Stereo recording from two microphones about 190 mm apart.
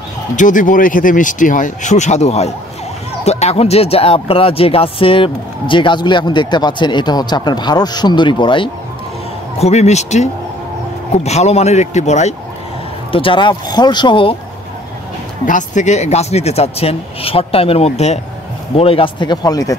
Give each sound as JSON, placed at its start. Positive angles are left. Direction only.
{"t": 0.4, "sound": "speech", "side_deg": 45}
{"t": 9.6, "sound": "speech", "side_deg": 35}
{"t": 15.4, "sound": "speech", "side_deg": 40}